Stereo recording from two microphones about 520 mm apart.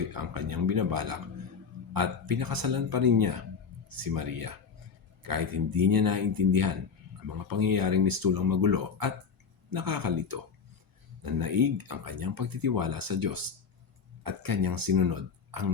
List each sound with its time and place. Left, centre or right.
0.1 s speech: right